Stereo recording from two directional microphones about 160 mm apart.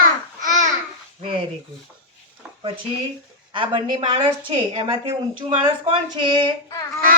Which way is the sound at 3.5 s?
30° right (ahead or behind).